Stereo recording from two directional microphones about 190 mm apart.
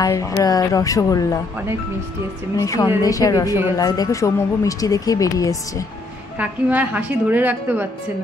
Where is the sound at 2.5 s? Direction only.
15° left (ahead or behind).